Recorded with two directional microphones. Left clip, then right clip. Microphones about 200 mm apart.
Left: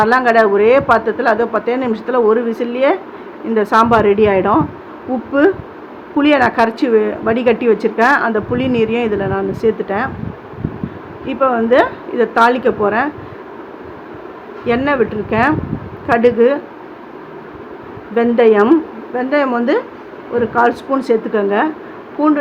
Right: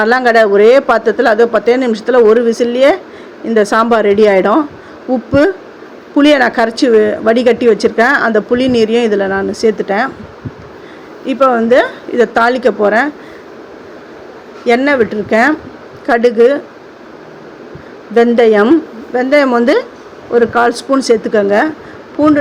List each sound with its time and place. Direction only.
0.0 s a woman's voice: 30° right (ahead or behind)
6.1 s a woman's voice: 25° right (ahead or behind)
11.3 s a woman's voice: 25° right (ahead or behind)
14.7 s a woman's voice: 25° right (ahead or behind)
18.1 s a woman's voice: 25° right (ahead or behind)